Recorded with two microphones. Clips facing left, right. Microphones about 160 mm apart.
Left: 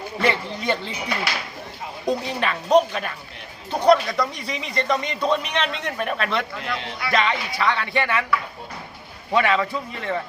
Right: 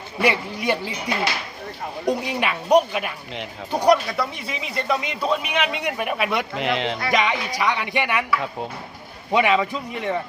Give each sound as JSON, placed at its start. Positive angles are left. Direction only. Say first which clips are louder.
{"t": 0.2, "sound": "speech", "louder": "right 2 dB", "side_deg": -10}
{"t": 2.0, "sound": "speech", "louder": "right 1 dB", "side_deg": -10}
{"t": 6.6, "sound": "speech", "louder": "right 7 dB", "side_deg": -90}
{"t": 7.1, "sound": "speech", "louder": "left 2 dB", "side_deg": -15}